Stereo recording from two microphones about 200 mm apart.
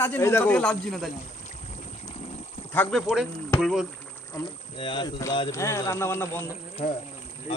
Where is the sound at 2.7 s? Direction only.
5° left (ahead or behind).